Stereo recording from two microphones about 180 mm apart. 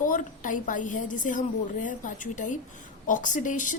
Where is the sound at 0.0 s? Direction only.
50° left (ahead or behind).